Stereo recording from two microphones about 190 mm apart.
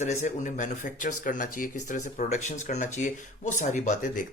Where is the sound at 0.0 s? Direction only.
40° left (ahead or behind).